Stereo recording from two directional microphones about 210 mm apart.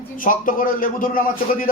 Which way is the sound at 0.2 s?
40° left (ahead or behind).